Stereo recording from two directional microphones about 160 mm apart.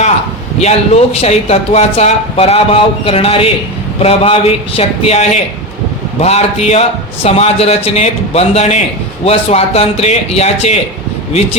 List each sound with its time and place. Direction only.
0.6 s speech: 40° left (ahead or behind)